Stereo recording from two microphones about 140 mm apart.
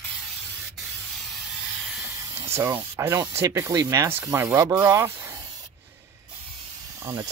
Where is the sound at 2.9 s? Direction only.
15° right (ahead or behind).